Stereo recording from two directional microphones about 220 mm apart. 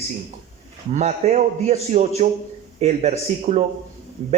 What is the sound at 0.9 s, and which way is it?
Speech, 30° right (ahead or behind).